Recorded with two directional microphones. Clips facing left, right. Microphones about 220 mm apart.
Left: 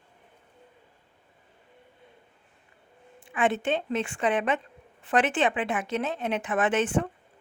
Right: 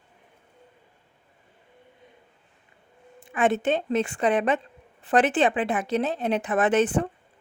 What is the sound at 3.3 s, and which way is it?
Speech, 40° right (ahead or behind).